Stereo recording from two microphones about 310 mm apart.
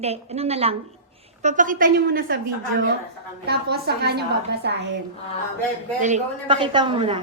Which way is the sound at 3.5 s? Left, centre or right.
Right.